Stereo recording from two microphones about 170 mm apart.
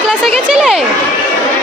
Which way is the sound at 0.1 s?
Centre (ahead or behind).